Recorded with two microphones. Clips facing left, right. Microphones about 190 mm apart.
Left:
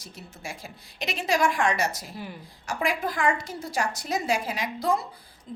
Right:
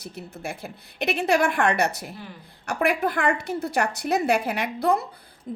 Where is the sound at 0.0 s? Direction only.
60° right (ahead or behind).